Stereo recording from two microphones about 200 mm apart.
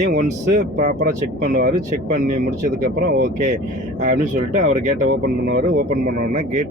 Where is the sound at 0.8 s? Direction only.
40° right (ahead or behind).